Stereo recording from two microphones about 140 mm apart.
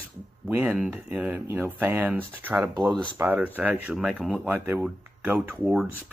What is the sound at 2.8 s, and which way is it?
Speech, 5° left (ahead or behind).